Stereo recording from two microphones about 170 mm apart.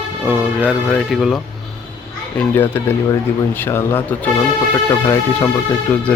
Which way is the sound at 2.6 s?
15° left (ahead or behind).